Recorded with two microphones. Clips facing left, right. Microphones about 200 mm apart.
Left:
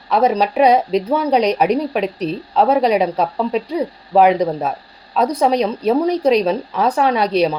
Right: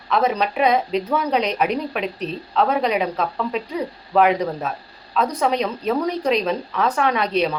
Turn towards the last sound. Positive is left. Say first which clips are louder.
# left 4 dB
turn(degrees=35)  # may be behind; listen again after turning